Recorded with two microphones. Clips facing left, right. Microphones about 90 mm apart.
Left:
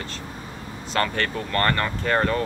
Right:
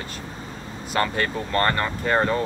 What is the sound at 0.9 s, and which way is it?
Speech, 15° right (ahead or behind).